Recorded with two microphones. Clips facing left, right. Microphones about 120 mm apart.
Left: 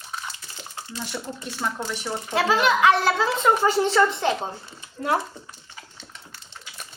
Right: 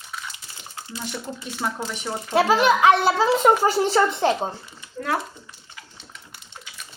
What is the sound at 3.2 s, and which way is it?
Speech, 30° right (ahead or behind).